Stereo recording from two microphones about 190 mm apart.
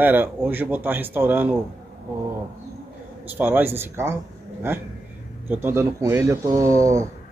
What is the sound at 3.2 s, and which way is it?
Speech, 10° right (ahead or behind).